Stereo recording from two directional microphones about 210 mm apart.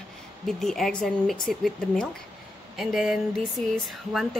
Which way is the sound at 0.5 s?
Centre (ahead or behind).